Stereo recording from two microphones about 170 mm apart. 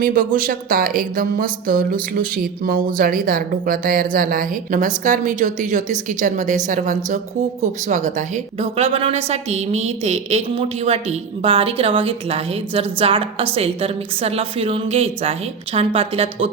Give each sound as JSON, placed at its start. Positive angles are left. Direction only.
{"t": 0.0, "sound": "a woman's voice", "side_deg": -55}